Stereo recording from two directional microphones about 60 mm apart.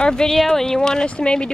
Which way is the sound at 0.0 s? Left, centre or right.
Centre.